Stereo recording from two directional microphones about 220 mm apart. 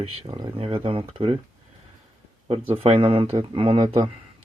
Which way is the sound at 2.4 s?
25° right (ahead or behind).